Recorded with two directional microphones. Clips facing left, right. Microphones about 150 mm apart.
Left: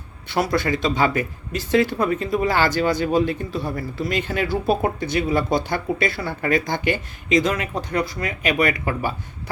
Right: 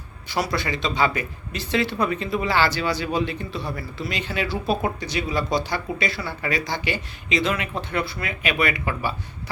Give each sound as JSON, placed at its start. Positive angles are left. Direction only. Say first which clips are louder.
{"t": 0.3, "sound": "speech", "louder": "left 4 dB", "side_deg": 50}